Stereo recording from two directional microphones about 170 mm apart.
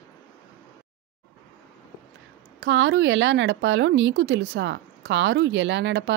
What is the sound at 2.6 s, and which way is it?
A woman's voice, 90° right.